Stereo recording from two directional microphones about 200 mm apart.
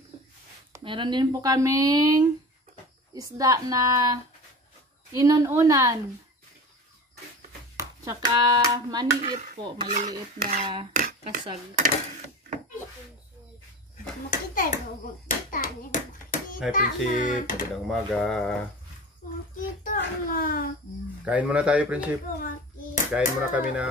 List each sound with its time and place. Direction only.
0.7 s a woman's voice: 25° right (ahead or behind)
5.2 s a woman's voice: 15° right (ahead or behind)
7.7 s hands: 15° right (ahead or behind)
9.6 s speech: 20° right (ahead or behind)
9.9 s dishes: 40° right (ahead or behind)
10.9 s speech: 40° right (ahead or behind)
14.5 s a child's voice: 45° left (ahead or behind)
15.2 s hands: 45° left (ahead or behind)
16.7 s a child's voice: 40° left (ahead or behind)
17.8 s speech: centre (ahead or behind)
19.5 s a sound: 40° left (ahead or behind)
21.2 s speech: 5° right (ahead or behind)
23.1 s speech: 5° right (ahead or behind)